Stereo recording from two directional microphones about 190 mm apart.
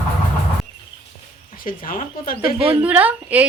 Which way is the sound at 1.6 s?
45° left (ahead or behind).